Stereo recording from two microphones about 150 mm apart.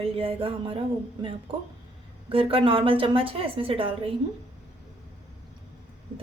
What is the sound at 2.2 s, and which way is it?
A woman's voice, 40° right (ahead or behind).